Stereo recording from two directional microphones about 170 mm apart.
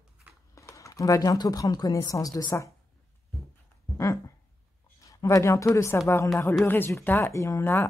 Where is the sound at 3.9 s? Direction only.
20° left (ahead or behind).